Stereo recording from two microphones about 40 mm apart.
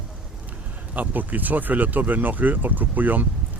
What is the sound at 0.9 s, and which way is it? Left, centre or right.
Speech, right.